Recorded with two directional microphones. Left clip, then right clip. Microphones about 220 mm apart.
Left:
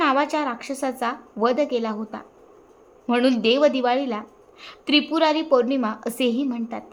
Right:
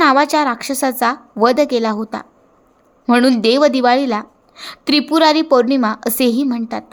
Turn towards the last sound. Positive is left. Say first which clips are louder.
# right 7 dB
turn(degrees=-25)  # may be behind; listen again after turning